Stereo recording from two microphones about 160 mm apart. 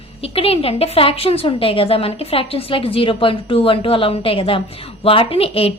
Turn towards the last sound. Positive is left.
turn(degrees=35)  # may be behind; listen again after turning